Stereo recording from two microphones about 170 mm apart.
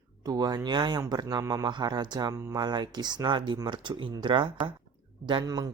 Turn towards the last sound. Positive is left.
turn(degrees=-20)  # may be behind; listen again after turning